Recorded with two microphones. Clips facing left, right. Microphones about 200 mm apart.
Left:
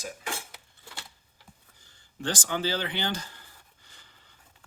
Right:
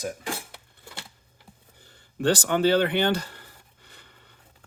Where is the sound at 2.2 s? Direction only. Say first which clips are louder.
Right 9 dB; 65° right (ahead or behind).